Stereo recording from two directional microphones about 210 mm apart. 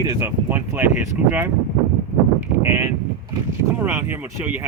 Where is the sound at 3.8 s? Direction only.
10° right (ahead or behind).